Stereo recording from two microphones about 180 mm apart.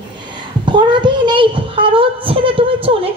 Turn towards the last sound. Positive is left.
turn(degrees=-30)  # may be behind; listen again after turning